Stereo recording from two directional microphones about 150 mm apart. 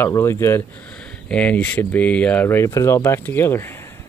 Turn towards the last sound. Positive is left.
turn(degrees=15)  # may be behind; listen again after turning